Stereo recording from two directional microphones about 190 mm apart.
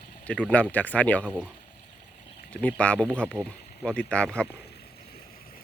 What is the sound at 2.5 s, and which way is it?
Speech, 5° left (ahead or behind).